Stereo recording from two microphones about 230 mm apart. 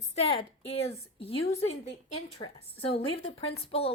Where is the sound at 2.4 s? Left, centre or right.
Left.